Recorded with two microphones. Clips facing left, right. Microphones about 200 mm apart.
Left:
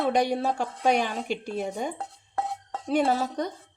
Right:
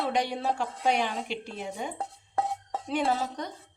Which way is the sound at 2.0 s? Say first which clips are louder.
Right 1 dB; 15° right (ahead or behind).